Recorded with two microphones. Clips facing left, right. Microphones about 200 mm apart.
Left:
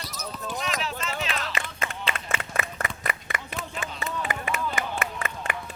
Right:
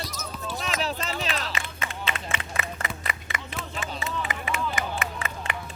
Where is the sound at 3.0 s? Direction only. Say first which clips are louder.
Left 2 dB; 55° left (ahead or behind).